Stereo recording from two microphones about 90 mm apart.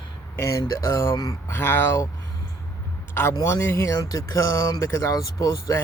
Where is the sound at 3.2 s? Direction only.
30° left (ahead or behind).